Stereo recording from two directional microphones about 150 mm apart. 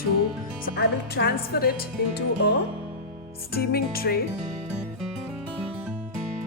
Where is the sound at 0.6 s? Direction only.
90° left.